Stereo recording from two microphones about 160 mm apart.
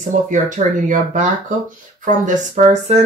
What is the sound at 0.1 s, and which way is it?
Speech, 50° right (ahead or behind).